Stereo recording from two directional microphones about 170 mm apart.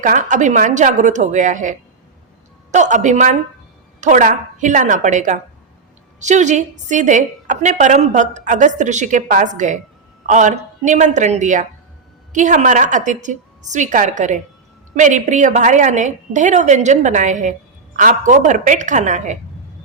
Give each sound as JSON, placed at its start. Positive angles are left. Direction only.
{"t": 0.0, "sound": "a woman's voice", "side_deg": -50}
{"t": 2.7, "sound": "a woman's voice", "side_deg": -45}